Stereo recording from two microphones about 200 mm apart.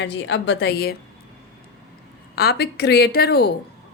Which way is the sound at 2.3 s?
50° left (ahead or behind).